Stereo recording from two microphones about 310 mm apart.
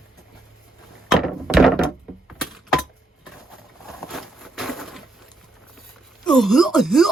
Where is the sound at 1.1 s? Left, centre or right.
Centre.